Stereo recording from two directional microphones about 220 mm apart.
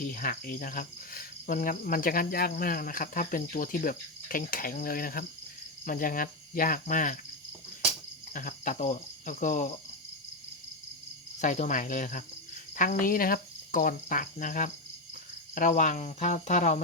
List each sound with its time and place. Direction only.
0.0 s cricket: 35° left (ahead or behind)
8.3 s cricket: 35° left (ahead or behind)
11.3 s cricket: 35° left (ahead or behind)